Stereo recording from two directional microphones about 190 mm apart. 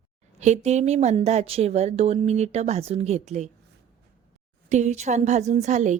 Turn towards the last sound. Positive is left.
turn(degrees=-40)  # may be behind; listen again after turning